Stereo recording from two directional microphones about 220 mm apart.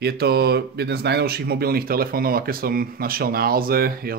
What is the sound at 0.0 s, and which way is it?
Speech, 45° right (ahead or behind).